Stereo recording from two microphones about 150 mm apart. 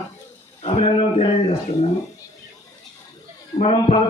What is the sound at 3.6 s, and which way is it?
Speech, 40° left (ahead or behind).